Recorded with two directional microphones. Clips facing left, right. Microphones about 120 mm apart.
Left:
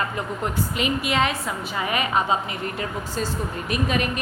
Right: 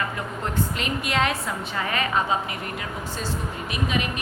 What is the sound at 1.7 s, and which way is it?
Speech, 15° left (ahead or behind).